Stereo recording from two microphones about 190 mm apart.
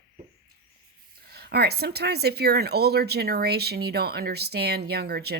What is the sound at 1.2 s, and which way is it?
Speech, 55° right (ahead or behind).